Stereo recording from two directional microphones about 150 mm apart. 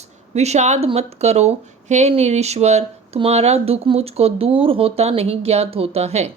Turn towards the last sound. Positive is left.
turn(degrees=-45)  # may be behind; listen again after turning